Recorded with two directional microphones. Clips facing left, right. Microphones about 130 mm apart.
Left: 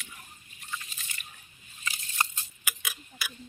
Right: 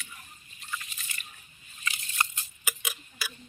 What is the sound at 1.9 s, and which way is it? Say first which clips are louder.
Biting: even; 30° left (ahead or behind).